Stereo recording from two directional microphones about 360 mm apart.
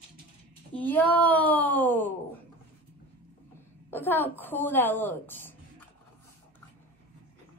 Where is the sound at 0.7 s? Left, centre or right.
Centre.